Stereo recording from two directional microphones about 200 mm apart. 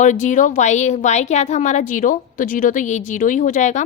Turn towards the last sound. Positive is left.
turn(degrees=35)  # may be behind; listen again after turning